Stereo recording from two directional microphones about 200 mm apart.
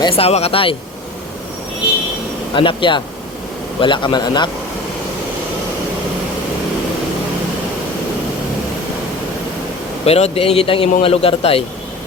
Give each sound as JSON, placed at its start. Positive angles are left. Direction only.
{"t": 0.0, "sound": "a man's voice", "side_deg": 30}
{"t": 2.6, "sound": "a man's voice", "side_deg": 25}
{"t": 10.1, "sound": "a man's voice", "side_deg": 30}